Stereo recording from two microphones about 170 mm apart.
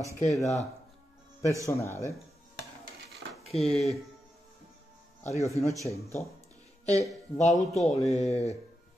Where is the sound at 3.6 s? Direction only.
Centre (ahead or behind).